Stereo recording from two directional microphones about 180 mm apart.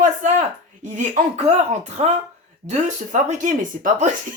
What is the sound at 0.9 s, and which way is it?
Speech, 40° right (ahead or behind).